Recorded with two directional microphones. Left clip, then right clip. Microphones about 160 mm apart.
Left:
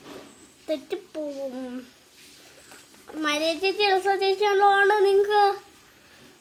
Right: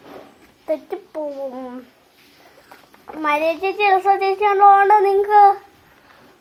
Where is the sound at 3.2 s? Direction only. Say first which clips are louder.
Right 6 dB; 30° left (ahead or behind).